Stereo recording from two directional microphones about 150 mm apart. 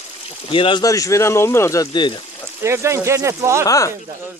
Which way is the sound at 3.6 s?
20° left (ahead or behind).